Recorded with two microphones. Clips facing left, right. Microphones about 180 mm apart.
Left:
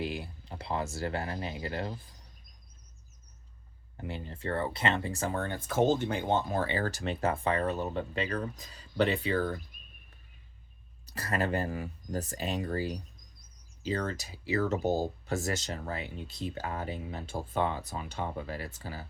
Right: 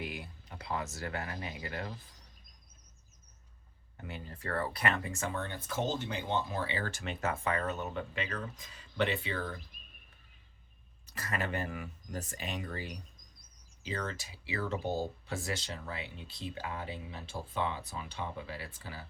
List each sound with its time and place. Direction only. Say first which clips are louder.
0.0 s speech: left 6 dB; 30° left (ahead or behind)
3.9 s speech: left 5 dB; 30° left (ahead or behind)
11.0 s speech: left 5 dB; 35° left (ahead or behind)